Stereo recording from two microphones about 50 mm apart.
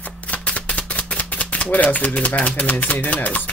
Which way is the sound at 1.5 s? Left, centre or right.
Left.